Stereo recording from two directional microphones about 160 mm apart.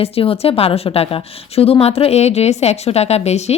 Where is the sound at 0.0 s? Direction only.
35° left (ahead or behind).